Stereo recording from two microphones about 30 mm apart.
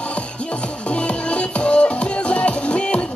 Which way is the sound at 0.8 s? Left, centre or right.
Left.